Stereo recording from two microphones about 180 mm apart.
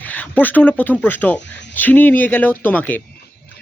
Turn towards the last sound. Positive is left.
turn(degrees=10)  # may be behind; listen again after turning